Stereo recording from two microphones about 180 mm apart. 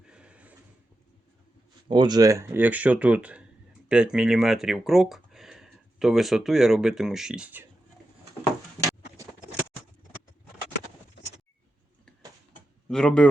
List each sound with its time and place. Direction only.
0.0 s a sound: 5° right (ahead or behind)
1.9 s speech: 25° right (ahead or behind)
12.9 s speech: 5° left (ahead or behind)